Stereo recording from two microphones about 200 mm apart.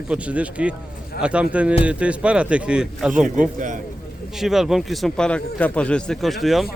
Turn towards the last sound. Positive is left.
turn(degrees=0)  # may be behind; listen again after turning